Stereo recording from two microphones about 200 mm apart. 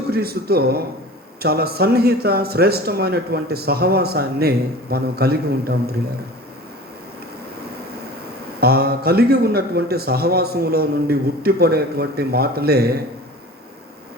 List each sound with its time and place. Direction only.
0.1 s speech: 50° right (ahead or behind)
8.6 s speech: 50° right (ahead or behind)